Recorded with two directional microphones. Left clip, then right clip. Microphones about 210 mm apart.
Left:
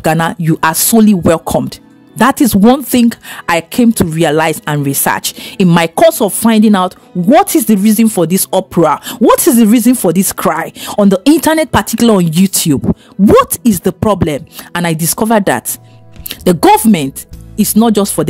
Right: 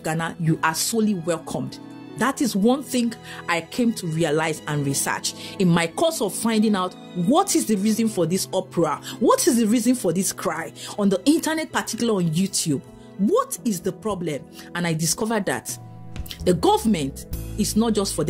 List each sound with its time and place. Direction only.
0.0 s speech: 50° left (ahead or behind)